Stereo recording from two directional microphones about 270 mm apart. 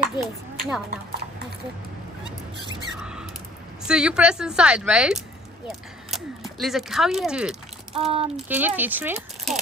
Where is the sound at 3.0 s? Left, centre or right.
Centre.